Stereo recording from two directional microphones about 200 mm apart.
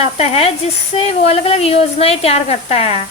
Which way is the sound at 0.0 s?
30° left (ahead or behind).